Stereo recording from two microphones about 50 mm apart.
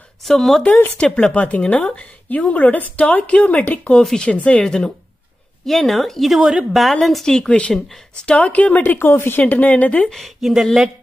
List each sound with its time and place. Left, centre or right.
0.2 s a woman's voice: centre
0.9 s a woman's voice: left
4.6 s speech: centre
5.7 s a woman's voice: centre
6.3 s a woman's voice: centre
6.8 s a woman's voice: centre; by 8.8 s left
8.8 s speech: left
9.4 s speech: left
10.0 s a woman's voice: centre